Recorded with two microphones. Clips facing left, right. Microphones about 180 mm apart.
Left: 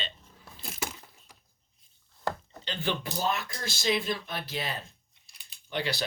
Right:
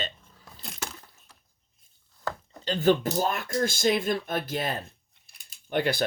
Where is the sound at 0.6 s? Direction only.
5° left (ahead or behind).